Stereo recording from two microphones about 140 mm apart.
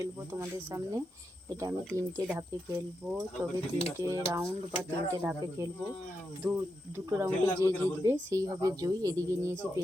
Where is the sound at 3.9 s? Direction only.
25° right (ahead or behind).